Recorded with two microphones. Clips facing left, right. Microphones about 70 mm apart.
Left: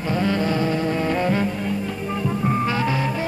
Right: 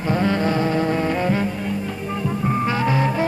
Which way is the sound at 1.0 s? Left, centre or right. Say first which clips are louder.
Even; centre.